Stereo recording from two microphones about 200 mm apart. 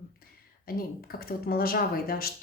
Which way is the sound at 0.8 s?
50° left (ahead or behind).